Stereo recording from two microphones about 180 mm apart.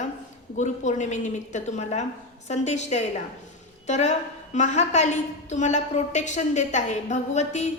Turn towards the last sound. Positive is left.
turn(degrees=40)  # may be behind; listen again after turning